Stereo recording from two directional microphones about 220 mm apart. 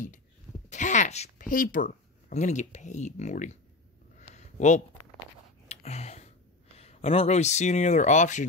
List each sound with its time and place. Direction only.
0.7 s speech: 35° left (ahead or behind)
4.2 s a sound: 35° left (ahead or behind)
6.8 s speech: 30° left (ahead or behind)